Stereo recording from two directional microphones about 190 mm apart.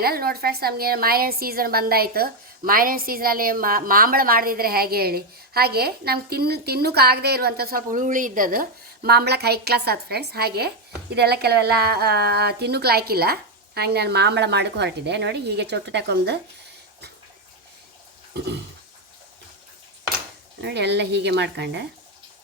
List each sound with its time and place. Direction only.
0.0 s a woman's voice: 50° right (ahead or behind)
20.6 s a woman's voice: 65° right (ahead or behind)